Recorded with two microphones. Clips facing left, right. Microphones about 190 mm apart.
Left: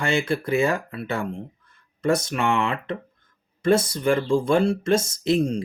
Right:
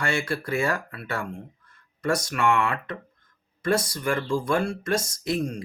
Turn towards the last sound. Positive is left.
turn(degrees=25)  # may be behind; listen again after turning